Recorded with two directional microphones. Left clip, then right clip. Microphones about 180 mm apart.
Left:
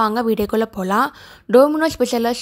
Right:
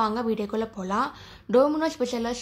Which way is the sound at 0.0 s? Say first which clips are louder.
Left 8 dB; 45° left (ahead or behind).